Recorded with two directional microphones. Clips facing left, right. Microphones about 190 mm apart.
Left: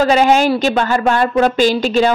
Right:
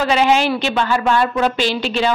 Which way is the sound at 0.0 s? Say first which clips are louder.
Left 4 dB; 45° left (ahead or behind).